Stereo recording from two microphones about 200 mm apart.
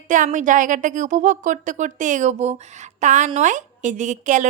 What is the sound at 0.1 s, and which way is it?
A woman's voice, 40° right (ahead or behind).